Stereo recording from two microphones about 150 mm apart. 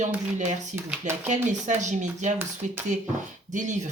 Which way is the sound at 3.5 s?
55° right (ahead or behind).